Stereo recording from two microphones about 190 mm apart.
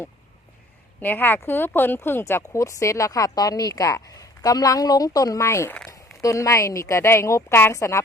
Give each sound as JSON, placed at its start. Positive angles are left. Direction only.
{"t": 1.0, "sound": "speech", "side_deg": 10}